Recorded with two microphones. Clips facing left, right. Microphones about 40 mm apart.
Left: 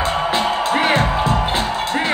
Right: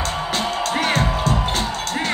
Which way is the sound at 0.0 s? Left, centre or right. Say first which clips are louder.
Left 5 dB; left.